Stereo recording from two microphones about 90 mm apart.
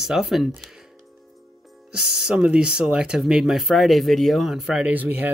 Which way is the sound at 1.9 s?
10° right (ahead or behind).